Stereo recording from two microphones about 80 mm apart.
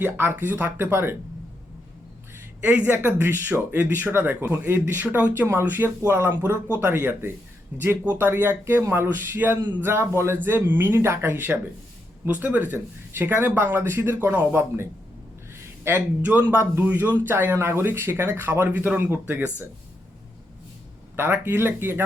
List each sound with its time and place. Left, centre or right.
0.0 s speech: right
2.6 s speech: centre
21.2 s speech: right